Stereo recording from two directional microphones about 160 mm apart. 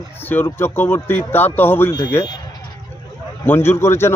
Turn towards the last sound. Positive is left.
turn(degrees=15)  # may be behind; listen again after turning